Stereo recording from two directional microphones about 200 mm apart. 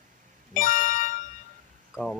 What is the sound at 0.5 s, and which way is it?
Music, 40° left (ahead or behind).